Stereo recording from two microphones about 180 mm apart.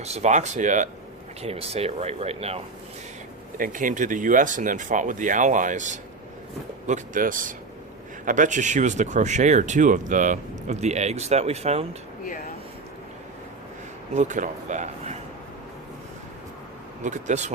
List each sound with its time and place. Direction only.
0.0 s speech: 40° right (ahead or behind)
3.6 s speech: 45° right (ahead or behind)
12.2 s speech: 50° left (ahead or behind)
14.1 s a man's voice: 40° right (ahead or behind)
17.0 s speech: 40° right (ahead or behind)